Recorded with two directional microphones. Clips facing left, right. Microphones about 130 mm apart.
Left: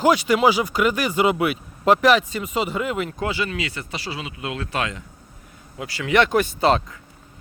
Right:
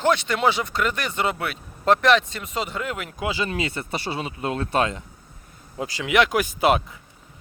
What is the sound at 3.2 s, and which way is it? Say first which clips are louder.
Speech: left 1 dB; 15° right (ahead or behind).